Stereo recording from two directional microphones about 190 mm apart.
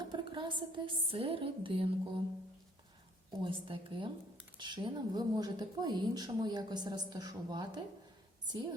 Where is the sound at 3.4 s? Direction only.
25° right (ahead or behind).